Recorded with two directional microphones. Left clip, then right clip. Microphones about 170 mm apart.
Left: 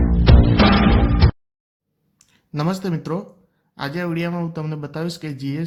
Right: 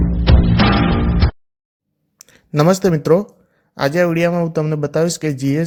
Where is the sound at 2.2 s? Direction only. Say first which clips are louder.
Right 10 dB; 45° right (ahead or behind).